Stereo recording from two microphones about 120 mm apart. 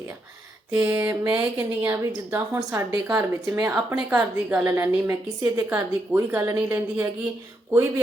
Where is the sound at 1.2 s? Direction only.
35° right (ahead or behind).